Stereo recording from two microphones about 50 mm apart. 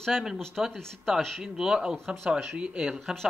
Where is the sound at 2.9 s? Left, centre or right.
Centre.